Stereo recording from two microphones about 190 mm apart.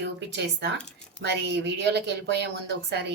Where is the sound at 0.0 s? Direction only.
65° right (ahead or behind).